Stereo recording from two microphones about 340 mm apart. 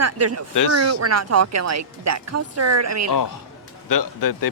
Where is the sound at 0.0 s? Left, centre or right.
Right.